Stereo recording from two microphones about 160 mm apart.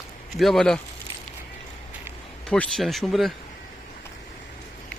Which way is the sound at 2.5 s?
5° left (ahead or behind).